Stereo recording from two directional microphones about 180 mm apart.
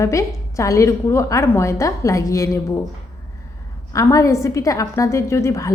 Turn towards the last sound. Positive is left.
turn(degrees=15)  # may be behind; listen again after turning